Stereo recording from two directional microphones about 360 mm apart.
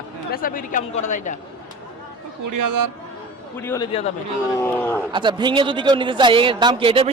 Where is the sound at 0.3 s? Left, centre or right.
Left.